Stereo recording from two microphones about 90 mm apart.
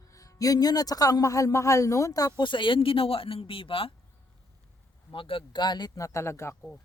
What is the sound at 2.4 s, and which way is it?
Speech, 65° left (ahead or behind).